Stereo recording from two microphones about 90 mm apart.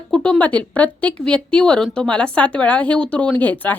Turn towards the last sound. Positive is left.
turn(degrees=20)  # may be behind; listen again after turning